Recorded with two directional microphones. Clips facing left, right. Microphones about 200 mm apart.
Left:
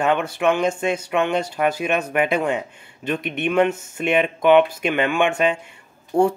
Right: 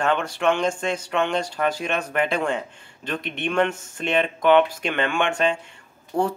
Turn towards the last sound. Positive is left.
turn(degrees=25)  # may be behind; listen again after turning